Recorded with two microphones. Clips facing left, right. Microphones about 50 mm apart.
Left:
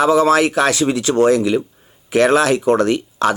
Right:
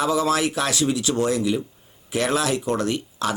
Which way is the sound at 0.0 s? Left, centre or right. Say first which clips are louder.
Left 8 dB; left.